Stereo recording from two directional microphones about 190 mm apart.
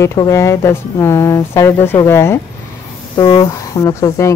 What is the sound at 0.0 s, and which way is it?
A woman's voice, 15° left (ahead or behind).